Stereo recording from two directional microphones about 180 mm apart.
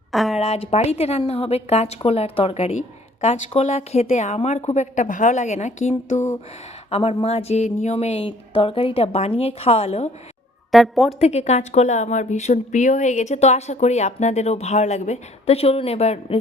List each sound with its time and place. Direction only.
0.1 s a sound: centre (ahead or behind)
0.3 s speech: 35° left (ahead or behind)
6.1 s speech: 15° left (ahead or behind)
6.9 s speech: 35° left (ahead or behind)
10.7 s a woman's voice: centre (ahead or behind)
11.2 s speech: 35° left (ahead or behind)